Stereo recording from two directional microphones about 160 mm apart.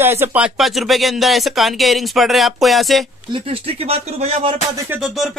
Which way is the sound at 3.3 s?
35° right (ahead or behind).